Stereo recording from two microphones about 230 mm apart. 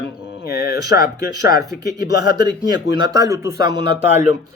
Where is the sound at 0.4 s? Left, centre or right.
Left.